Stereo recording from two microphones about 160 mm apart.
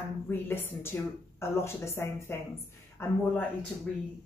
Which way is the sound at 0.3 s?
15° left (ahead or behind).